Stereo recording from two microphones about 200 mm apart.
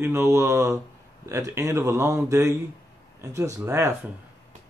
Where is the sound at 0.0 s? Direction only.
15° right (ahead or behind).